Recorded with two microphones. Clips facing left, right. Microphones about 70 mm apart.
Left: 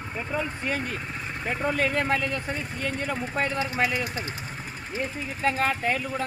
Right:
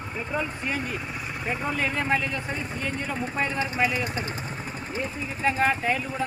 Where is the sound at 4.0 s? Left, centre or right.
Right.